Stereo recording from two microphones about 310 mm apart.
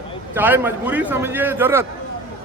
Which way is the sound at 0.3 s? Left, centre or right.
Centre.